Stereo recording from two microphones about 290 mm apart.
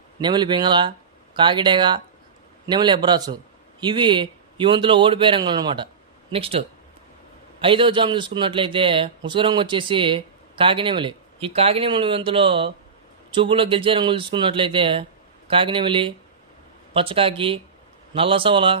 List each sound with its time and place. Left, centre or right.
0.2 s a man's voice: centre
7.6 s a man's voice: centre